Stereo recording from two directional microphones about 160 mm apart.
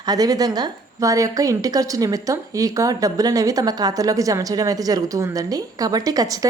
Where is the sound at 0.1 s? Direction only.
25° right (ahead or behind).